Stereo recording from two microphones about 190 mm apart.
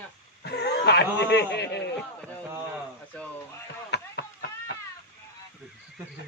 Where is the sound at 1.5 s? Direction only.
65° left (ahead or behind).